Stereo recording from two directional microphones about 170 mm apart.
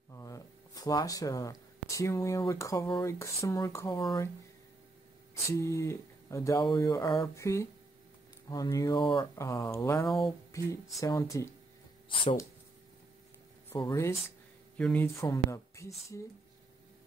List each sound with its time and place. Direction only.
0.1 s speech: 20° left (ahead or behind)
5.3 s speech: 15° left (ahead or behind)
12.1 s speech: 30° left (ahead or behind)
13.7 s speech: 20° left (ahead or behind)
14.8 s speech: 5° left (ahead or behind)
15.1 s speech: 20° left (ahead or behind)